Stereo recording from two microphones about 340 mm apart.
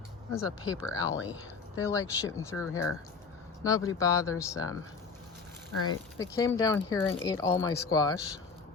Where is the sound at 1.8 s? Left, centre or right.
Centre.